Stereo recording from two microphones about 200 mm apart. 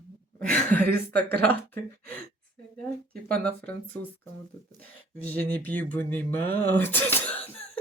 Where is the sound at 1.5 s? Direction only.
10° left (ahead or behind).